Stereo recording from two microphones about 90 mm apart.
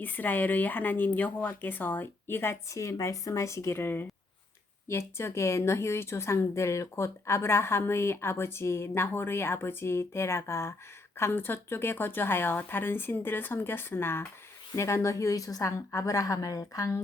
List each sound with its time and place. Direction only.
0.0 s a woman's voice: 20° left (ahead or behind); by 17.0 s 40° left (ahead or behind)